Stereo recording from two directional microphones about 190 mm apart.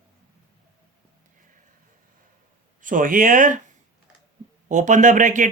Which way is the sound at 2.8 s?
45° right (ahead or behind).